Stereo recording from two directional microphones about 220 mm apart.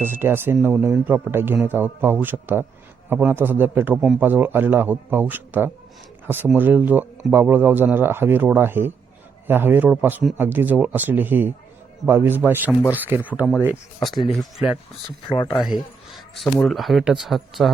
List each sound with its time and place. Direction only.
0.0 s speech: 10° right (ahead or behind)
15.3 s speech: 20° left (ahead or behind)
15.5 s a sound: centre (ahead or behind)
16.6 s speech: centre (ahead or behind)